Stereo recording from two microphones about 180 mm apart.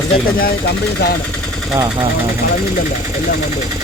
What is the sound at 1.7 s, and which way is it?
Speech, 20° right (ahead or behind).